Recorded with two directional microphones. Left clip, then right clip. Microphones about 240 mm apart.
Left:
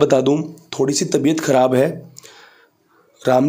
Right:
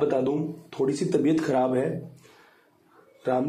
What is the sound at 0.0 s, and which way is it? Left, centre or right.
A man's voice, left.